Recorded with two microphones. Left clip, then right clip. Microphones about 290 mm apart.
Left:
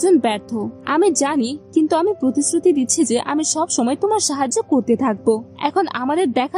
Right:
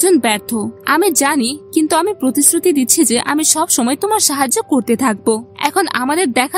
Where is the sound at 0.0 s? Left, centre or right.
Right.